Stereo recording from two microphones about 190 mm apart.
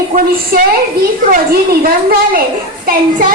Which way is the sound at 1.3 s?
50° right (ahead or behind).